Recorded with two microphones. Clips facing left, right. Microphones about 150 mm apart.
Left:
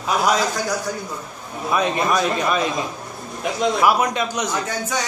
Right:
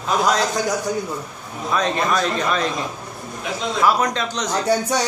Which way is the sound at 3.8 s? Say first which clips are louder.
Right 3 dB; 10° left (ahead or behind).